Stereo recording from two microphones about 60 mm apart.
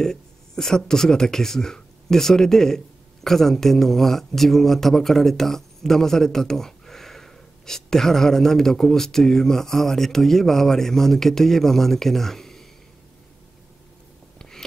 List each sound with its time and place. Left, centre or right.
0.0 s speech: centre